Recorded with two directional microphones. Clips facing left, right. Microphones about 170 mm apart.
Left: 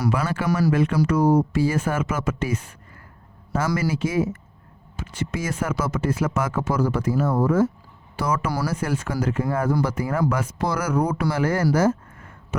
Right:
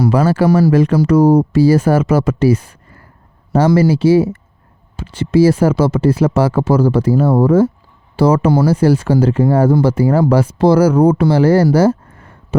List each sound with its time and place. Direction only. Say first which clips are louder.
0.0 s speech: right 11 dB; 35° right (ahead or behind)